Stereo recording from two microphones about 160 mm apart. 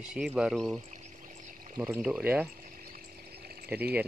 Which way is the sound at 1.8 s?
10° right (ahead or behind).